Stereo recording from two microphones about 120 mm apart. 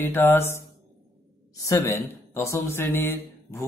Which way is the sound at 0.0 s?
15° left (ahead or behind).